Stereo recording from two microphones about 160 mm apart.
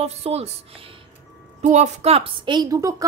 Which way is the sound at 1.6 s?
45° right (ahead or behind).